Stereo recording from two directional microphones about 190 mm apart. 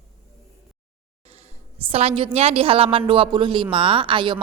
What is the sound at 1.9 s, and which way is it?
A woman's voice, 30° right (ahead or behind).